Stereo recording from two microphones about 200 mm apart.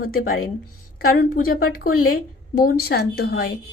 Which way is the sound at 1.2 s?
50° left (ahead or behind).